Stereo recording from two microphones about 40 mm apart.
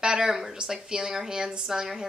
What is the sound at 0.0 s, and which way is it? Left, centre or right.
A woman's voice, centre.